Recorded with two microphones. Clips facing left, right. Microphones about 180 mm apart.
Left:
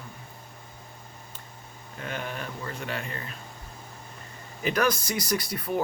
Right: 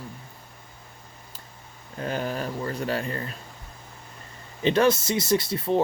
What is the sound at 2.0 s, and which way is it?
Speech, 35° right (ahead or behind).